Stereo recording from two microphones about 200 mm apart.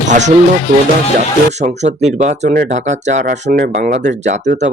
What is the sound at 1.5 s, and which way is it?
Speech, 35° right (ahead or behind).